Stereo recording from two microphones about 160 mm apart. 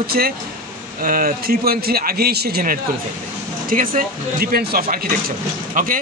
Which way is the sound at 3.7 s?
60° right (ahead or behind).